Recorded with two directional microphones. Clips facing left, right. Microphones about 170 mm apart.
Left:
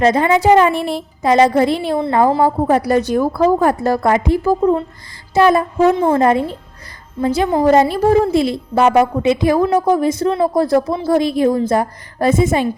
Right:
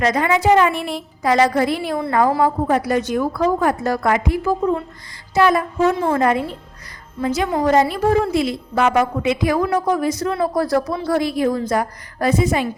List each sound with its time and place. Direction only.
0.0 s a woman's voice: 30° left (ahead or behind)